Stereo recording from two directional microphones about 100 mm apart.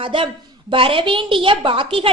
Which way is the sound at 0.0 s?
60° right (ahead or behind).